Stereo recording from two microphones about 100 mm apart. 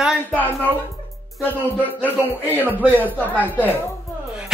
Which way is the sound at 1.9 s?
15° right (ahead or behind).